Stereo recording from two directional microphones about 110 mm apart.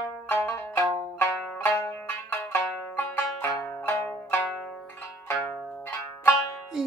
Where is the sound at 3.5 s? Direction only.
25° left (ahead or behind).